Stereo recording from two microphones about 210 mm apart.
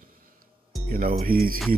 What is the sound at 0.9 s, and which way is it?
Speech, 45° right (ahead or behind).